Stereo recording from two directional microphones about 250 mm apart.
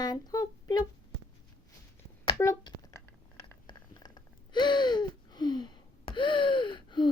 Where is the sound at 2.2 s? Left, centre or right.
Centre.